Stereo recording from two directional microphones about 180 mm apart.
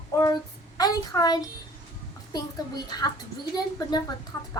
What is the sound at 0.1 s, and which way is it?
Child singing, 20° left (ahead or behind).